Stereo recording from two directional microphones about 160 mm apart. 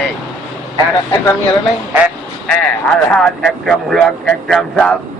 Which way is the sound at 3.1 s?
5° left (ahead or behind).